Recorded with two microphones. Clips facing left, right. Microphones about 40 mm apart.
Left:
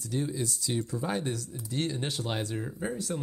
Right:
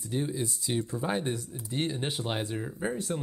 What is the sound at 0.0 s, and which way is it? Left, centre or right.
Speech, right.